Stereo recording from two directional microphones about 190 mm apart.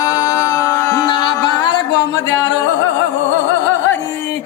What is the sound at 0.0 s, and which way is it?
Music, 20° left (ahead or behind).